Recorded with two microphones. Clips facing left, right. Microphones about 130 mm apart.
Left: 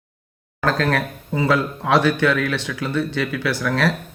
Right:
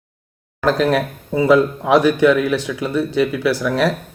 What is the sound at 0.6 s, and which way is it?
Speech, 15° right (ahead or behind).